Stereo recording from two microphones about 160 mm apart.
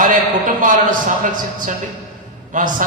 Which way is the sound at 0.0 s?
55° right (ahead or behind).